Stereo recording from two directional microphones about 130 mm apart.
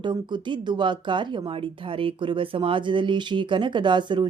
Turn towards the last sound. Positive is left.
turn(degrees=-35)  # may be behind; listen again after turning